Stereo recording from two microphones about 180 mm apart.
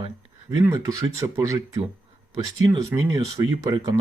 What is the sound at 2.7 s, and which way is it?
Speech, 20° right (ahead or behind).